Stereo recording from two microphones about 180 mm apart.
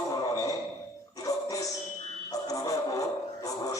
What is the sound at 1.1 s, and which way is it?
Music, 20° left (ahead or behind).